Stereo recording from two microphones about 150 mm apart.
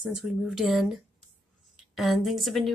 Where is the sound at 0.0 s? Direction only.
5° right (ahead or behind).